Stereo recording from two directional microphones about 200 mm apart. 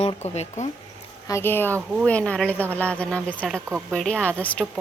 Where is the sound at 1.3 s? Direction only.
10° left (ahead or behind).